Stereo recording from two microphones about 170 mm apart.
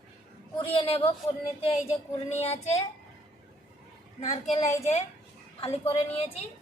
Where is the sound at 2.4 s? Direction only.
40° left (ahead or behind).